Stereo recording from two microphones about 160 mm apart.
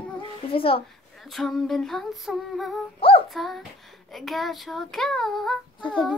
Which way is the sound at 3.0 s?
35° left (ahead or behind).